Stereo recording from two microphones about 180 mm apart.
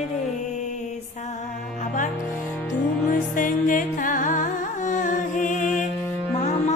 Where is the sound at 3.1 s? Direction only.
45° left (ahead or behind).